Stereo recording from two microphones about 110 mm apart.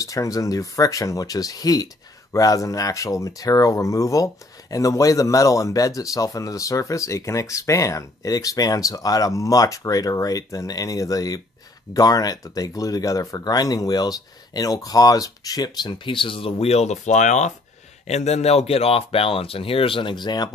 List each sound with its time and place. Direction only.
0.0 s speech: 30° left (ahead or behind)